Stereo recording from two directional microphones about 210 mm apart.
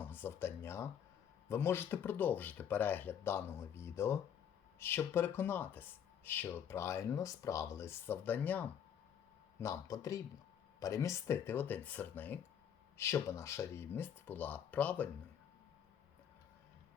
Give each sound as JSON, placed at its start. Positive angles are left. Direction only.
{"t": 0.0, "sound": "speech", "side_deg": 10}